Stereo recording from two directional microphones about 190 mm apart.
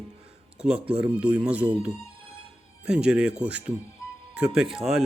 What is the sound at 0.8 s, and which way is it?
Speech, 30° right (ahead or behind).